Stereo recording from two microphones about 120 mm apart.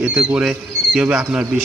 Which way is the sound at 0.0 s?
10° right (ahead or behind).